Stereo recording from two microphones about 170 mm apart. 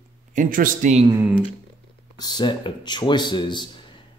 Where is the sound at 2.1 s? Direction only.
25° left (ahead or behind).